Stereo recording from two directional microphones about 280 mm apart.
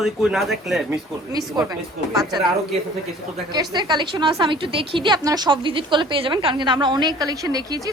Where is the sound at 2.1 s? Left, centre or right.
Centre.